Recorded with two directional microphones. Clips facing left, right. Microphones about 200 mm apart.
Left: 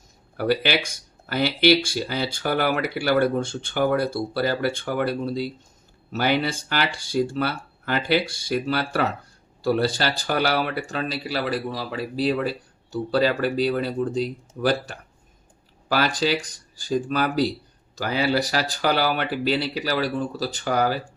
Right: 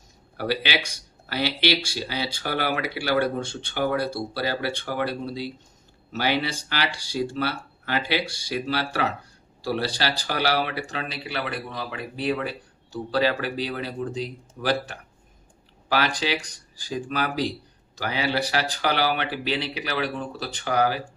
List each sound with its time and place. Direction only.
0.3 s speech: 50° left (ahead or behind)
15.9 s speech: 40° left (ahead or behind)